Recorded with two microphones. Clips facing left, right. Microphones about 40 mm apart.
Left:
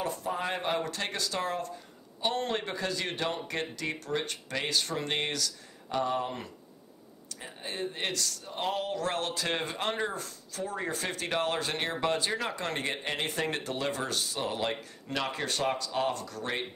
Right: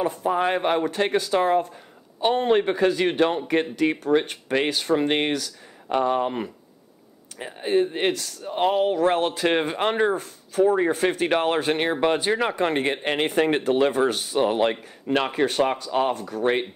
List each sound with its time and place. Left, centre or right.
0.0 s speech: right
0.4 s speech: right
15.2 s speech: right